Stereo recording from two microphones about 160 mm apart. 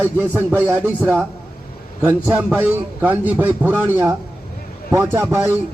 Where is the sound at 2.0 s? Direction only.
10° right (ahead or behind).